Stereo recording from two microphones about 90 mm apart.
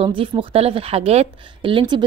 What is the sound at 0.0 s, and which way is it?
Speech, 80° right.